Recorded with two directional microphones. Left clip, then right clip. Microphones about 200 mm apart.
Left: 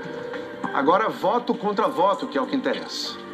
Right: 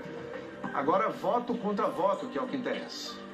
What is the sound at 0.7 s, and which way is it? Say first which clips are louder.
A man's voice: left 8 dB; 45° left (ahead or behind).